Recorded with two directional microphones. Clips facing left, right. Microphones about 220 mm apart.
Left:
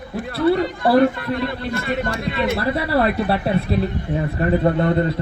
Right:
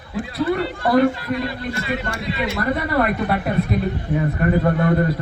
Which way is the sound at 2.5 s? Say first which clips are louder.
Right 2 dB; 30° left (ahead or behind).